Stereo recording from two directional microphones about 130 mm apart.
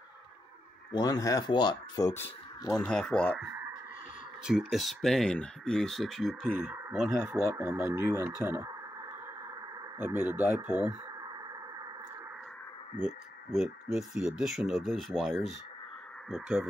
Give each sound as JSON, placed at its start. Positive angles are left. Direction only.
{"t": 0.9, "sound": "speech", "side_deg": 30}
{"t": 2.9, "sound": "speech", "side_deg": 5}
{"t": 4.5, "sound": "speech", "side_deg": 0}
{"t": 7.2, "sound": "speech", "side_deg": -20}
{"t": 9.9, "sound": "speech", "side_deg": -15}
{"t": 12.9, "sound": "speech", "side_deg": -5}